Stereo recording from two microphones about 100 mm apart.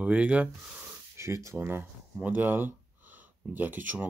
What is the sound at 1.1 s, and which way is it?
Speech, 30° right (ahead or behind).